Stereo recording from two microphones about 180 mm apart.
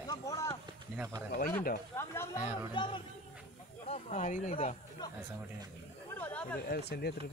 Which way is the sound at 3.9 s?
40° left (ahead or behind).